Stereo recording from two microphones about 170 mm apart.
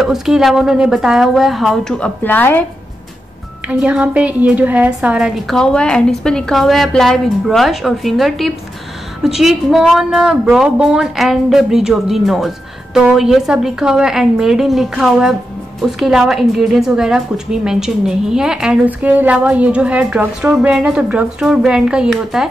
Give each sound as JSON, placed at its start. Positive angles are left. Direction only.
{"t": 0.0, "sound": "a woman's voice", "side_deg": 0}
{"t": 3.6, "sound": "a woman's voice", "side_deg": -10}